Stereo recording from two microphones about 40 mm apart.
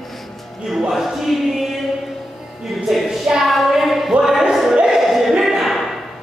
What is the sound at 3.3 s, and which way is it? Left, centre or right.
Child singing, centre.